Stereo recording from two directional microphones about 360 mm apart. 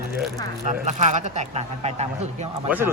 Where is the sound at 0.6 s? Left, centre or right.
Centre.